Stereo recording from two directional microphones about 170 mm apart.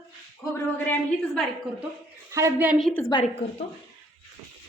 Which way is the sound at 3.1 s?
30° left (ahead or behind).